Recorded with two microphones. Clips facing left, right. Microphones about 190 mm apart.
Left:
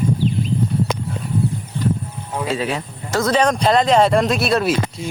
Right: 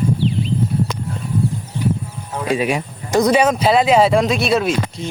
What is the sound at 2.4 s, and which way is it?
Speech, 15° right (ahead or behind).